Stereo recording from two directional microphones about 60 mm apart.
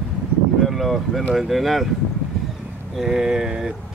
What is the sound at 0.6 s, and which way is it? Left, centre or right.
Speech, centre.